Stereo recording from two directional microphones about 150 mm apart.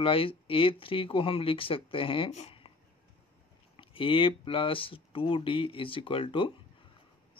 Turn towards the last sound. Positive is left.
turn(degrees=35)  # may be behind; listen again after turning